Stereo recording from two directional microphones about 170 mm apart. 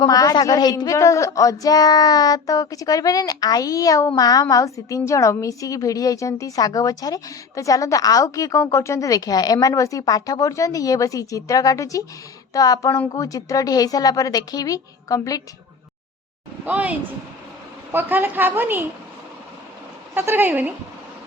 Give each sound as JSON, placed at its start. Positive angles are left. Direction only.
{"t": 0.0, "sound": "speech", "side_deg": 20}
{"t": 16.6, "sound": "a woman's voice", "side_deg": -10}
{"t": 17.9, "sound": "a woman's voice", "side_deg": -10}
{"t": 20.1, "sound": "a woman's voice", "side_deg": -10}